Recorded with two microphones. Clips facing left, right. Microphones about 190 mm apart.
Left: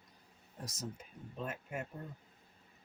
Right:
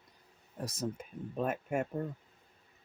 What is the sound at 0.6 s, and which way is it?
Speech, 55° right (ahead or behind).